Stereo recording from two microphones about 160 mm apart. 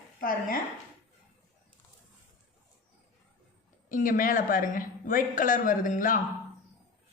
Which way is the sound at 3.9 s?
60° left (ahead or behind).